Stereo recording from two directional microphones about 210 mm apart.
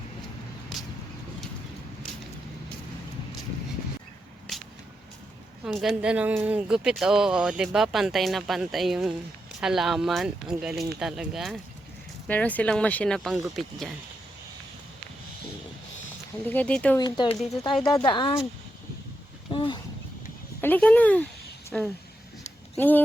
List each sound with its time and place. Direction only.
5.6 s speech: centre (ahead or behind)
16.5 s speech: 5° left (ahead or behind)
17.0 s speech: 20° left (ahead or behind)
19.5 s speech: 20° left (ahead or behind)
20.6 s speech: 10° left (ahead or behind)